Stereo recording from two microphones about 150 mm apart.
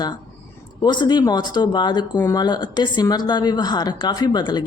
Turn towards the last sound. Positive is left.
turn(degrees=30)  # may be behind; listen again after turning